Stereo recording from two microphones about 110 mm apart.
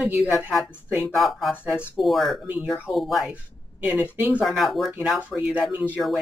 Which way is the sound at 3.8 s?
15° right (ahead or behind).